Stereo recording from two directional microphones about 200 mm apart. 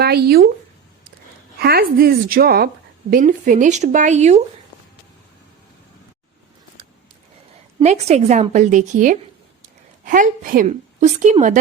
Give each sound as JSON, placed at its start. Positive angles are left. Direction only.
{"t": 0.0, "sound": "speech", "side_deg": -50}
{"t": 1.5, "sound": "a woman's voice", "side_deg": -50}
{"t": 7.8, "sound": "a woman's voice", "side_deg": -35}